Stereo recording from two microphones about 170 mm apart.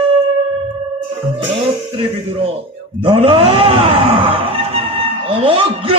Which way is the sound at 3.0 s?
30° right (ahead or behind).